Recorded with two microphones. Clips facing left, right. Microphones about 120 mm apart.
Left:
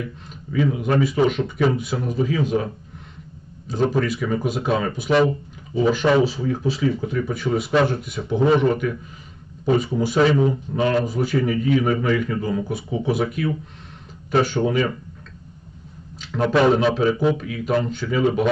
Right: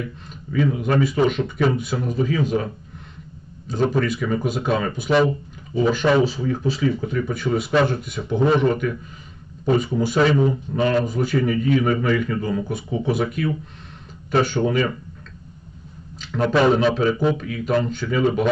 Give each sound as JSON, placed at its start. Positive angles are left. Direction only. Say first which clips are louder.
{"t": 0.0, "sound": "speech", "louder": "even", "side_deg": 5}
{"t": 3.9, "sound": "speech", "louder": "even", "side_deg": 0}
{"t": 16.1, "sound": "a sound", "louder": "right 1 dB", "side_deg": 0}
{"t": 16.4, "sound": "speech", "louder": "even", "side_deg": 5}